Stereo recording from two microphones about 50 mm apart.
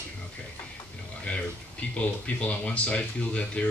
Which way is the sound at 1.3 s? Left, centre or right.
Left.